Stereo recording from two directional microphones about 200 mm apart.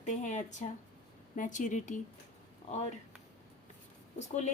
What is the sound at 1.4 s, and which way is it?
Speech, 40° left (ahead or behind).